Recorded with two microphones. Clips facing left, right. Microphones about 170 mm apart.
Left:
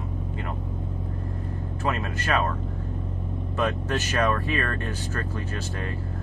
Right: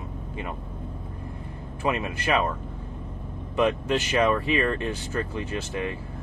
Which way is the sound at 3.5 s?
15° right (ahead or behind).